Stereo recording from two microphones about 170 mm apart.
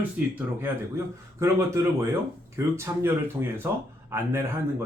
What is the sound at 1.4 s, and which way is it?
Speech, 15° right (ahead or behind).